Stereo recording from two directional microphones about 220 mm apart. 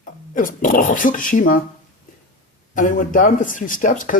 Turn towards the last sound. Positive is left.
turn(degrees=35)  # may be behind; listen again after turning